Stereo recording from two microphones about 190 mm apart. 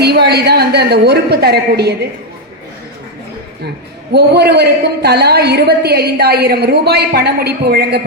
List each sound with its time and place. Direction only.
0.0 s a woman's voice: 60° right (ahead or behind)
4.1 s a woman's voice: 60° right (ahead or behind)